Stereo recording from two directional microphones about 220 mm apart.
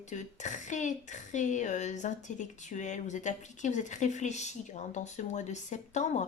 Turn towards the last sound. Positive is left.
turn(degrees=30)  # may be behind; listen again after turning